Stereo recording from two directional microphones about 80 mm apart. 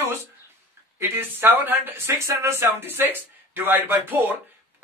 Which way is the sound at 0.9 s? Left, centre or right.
Right.